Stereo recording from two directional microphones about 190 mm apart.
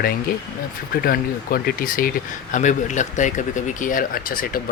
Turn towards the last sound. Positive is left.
turn(degrees=50)  # may be behind; listen again after turning